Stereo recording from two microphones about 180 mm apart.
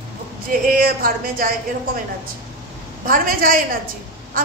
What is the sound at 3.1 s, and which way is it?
Speech, 50° right (ahead or behind).